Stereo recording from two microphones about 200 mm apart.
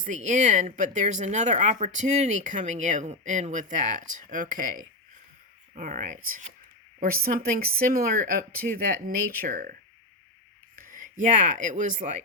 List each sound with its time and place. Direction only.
0.0 s speech: 40° right (ahead or behind)
10.8 s speech: 40° right (ahead or behind)